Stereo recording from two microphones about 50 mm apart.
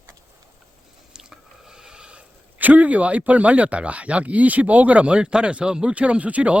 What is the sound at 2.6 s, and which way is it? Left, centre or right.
Speech, right.